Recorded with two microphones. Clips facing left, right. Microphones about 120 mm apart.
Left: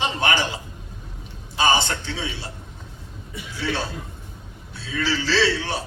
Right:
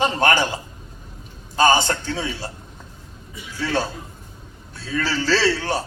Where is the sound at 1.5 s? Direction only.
45° right (ahead or behind).